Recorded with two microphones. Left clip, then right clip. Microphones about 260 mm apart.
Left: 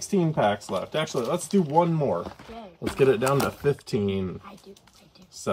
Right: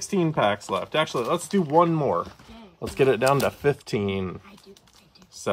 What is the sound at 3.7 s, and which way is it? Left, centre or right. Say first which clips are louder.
Speech: even; centre.